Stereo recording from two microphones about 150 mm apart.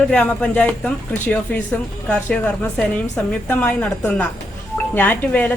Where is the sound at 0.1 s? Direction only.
5° left (ahead or behind).